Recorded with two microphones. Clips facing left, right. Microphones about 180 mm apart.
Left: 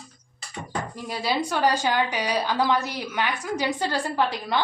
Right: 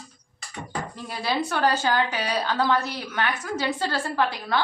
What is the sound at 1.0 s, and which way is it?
A woman's voice, 15° left (ahead or behind).